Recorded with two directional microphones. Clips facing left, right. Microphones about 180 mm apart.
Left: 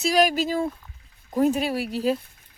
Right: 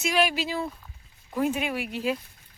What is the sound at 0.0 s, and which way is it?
Speech, 40° left (ahead or behind).